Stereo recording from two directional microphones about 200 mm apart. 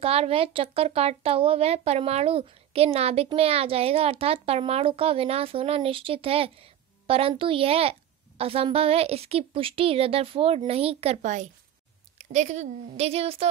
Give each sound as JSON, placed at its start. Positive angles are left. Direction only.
{"t": 0.0, "sound": "a woman's voice", "side_deg": -30}